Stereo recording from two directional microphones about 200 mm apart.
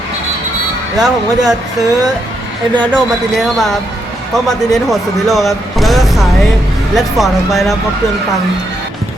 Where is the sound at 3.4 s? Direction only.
Centre (ahead or behind).